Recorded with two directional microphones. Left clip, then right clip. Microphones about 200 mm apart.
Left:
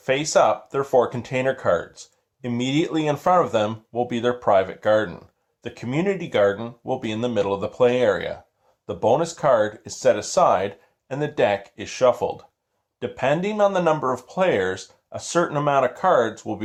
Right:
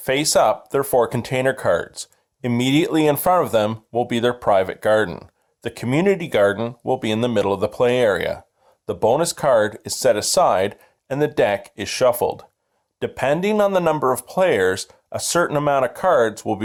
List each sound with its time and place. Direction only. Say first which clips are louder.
0.0 s speech: right 2 dB; 45° right (ahead or behind)